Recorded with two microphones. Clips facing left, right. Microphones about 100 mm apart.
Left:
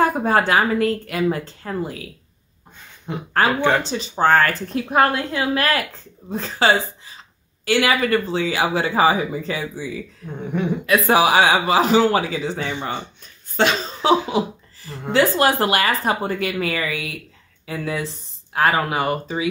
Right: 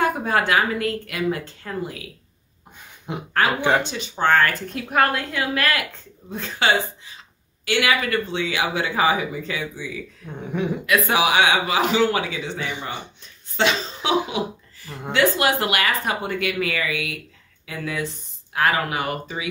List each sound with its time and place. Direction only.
0.0 s speech: 35° left (ahead or behind)
3.1 s speech: 15° right (ahead or behind)
3.8 s speech: 35° left (ahead or behind)
10.3 s speech: centre (ahead or behind)
11.1 s speech: 35° left (ahead or behind)